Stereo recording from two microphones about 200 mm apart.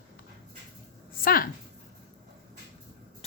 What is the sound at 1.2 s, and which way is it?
Speech, 45° left (ahead or behind).